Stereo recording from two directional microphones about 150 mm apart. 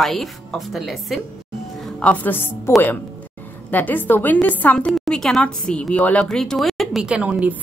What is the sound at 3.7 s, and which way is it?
A woman's voice, 10° left (ahead or behind).